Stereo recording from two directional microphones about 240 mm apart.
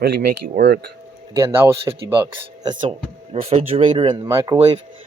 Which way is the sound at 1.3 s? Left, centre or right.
Centre.